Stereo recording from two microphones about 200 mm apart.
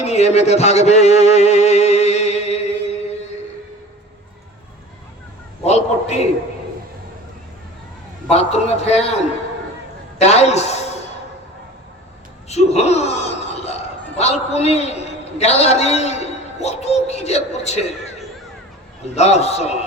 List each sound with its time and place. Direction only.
0.0 s music: 35° left (ahead or behind)
5.6 s a man's voice: 35° left (ahead or behind)
8.3 s a man's voice: 30° left (ahead or behind)
10.2 s a man's voice: 35° left (ahead or behind)
12.5 s speech: 35° left (ahead or behind)
19.1 s a man's voice: 35° left (ahead or behind)